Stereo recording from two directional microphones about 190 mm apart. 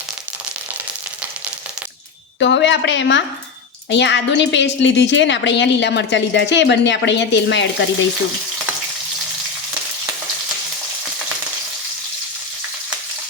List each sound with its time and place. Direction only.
2.4 s a woman's voice: 70° left (ahead or behind)